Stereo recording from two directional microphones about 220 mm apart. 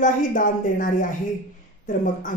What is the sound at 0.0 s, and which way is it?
Speech, 35° left (ahead or behind).